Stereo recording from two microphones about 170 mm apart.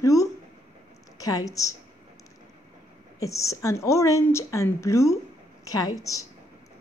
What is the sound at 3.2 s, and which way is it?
A woman's voice, 20° left (ahead or behind).